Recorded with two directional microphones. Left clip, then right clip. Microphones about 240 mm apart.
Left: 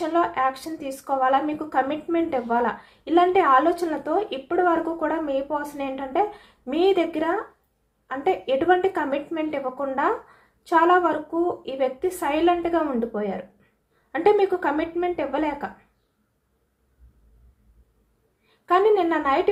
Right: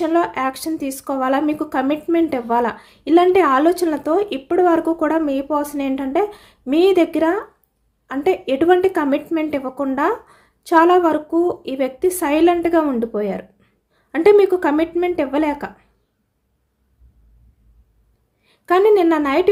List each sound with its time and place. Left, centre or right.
0.0 s speech: right
18.4 s speech: right